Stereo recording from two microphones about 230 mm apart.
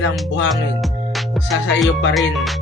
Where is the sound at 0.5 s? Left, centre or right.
Centre.